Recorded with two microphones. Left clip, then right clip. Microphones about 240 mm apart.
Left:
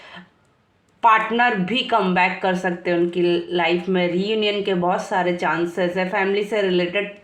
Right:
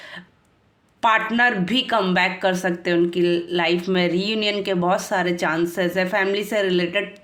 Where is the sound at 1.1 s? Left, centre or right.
Right.